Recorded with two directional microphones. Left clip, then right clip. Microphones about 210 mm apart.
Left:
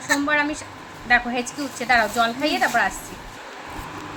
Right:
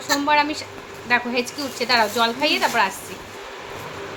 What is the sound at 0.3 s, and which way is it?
A woman's voice, 20° right (ahead or behind).